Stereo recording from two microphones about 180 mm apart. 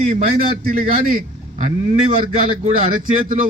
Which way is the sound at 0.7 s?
50° right (ahead or behind).